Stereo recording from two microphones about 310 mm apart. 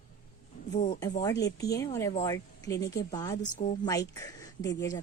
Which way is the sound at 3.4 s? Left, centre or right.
Left.